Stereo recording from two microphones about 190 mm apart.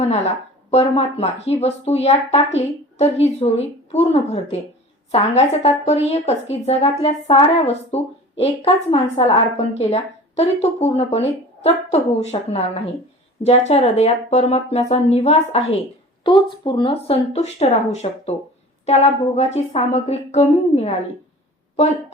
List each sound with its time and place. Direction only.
0.7 s a woman's voice: 35° left (ahead or behind)